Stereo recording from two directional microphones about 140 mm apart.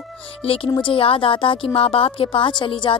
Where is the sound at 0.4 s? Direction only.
45° left (ahead or behind).